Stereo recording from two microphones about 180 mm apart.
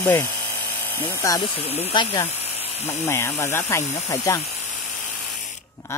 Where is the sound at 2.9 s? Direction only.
15° left (ahead or behind).